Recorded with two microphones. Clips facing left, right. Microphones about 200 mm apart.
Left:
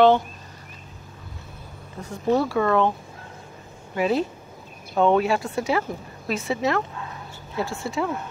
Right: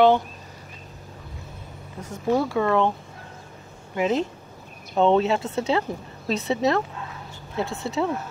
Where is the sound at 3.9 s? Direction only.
20° right (ahead or behind).